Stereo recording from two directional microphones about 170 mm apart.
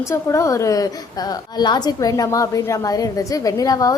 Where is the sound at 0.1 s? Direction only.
15° left (ahead or behind).